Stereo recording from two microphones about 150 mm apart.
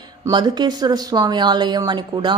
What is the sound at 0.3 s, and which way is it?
A woman's voice, 30° right (ahead or behind).